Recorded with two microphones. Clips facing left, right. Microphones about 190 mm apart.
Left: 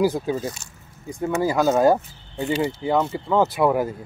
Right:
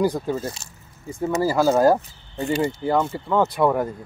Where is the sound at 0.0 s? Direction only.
5° left (ahead or behind).